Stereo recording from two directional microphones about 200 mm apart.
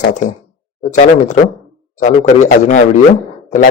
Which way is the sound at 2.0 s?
35° left (ahead or behind).